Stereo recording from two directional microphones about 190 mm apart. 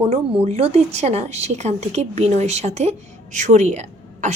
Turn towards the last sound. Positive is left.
turn(degrees=-35)  # may be behind; listen again after turning